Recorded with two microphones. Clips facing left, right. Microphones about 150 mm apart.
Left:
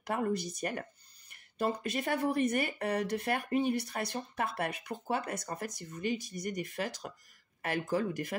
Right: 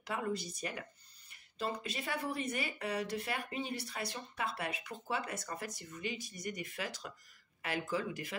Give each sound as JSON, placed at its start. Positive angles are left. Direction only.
{"t": 0.0, "sound": "speech", "side_deg": 45}